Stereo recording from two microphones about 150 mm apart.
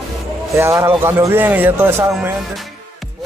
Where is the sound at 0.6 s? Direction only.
15° right (ahead or behind).